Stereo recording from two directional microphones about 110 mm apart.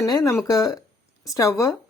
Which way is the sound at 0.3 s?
30° left (ahead or behind).